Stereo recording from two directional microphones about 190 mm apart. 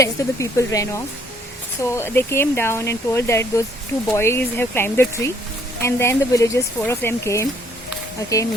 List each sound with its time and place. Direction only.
0.0 s speech: 15° left (ahead or behind)